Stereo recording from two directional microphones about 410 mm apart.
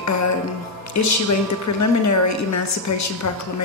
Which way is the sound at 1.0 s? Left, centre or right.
Left.